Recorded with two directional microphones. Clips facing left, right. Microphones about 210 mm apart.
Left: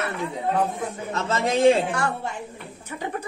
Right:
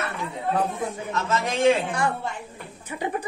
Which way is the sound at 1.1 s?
30° left (ahead or behind).